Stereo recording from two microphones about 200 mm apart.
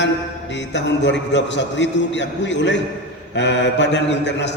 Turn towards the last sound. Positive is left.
turn(degrees=60)  # may be behind; listen again after turning